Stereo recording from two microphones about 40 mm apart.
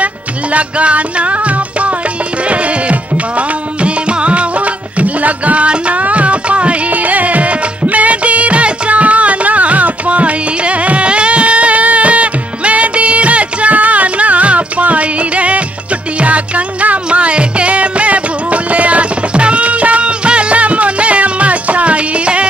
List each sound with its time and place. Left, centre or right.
0.0 s music: right